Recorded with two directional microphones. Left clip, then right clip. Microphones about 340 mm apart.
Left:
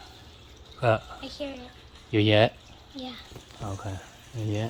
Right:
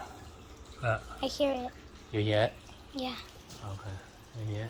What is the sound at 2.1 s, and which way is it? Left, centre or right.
Speech, left.